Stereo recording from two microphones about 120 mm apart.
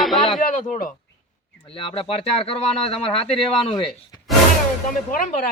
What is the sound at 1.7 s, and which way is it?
Speech, 45° left (ahead or behind).